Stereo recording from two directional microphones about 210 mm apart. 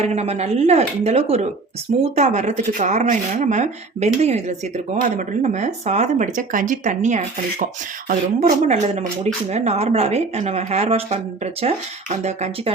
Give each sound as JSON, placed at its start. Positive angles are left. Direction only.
{"t": 0.0, "sound": "speech", "side_deg": -30}